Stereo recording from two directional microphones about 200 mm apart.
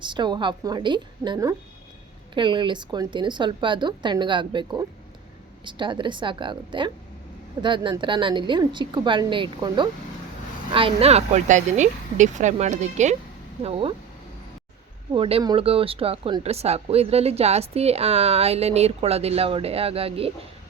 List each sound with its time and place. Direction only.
0.0 s speech: 25° right (ahead or behind)
15.1 s speech: 25° right (ahead or behind)